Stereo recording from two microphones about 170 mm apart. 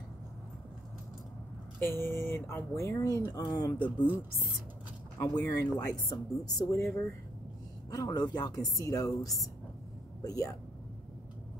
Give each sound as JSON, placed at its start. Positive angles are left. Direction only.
{"t": 1.8, "sound": "speech", "side_deg": 15}
{"t": 5.2, "sound": "speech", "side_deg": 20}
{"t": 7.9, "sound": "speech", "side_deg": 25}